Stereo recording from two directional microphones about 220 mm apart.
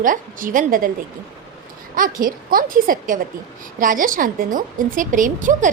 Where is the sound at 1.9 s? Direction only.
40° right (ahead or behind).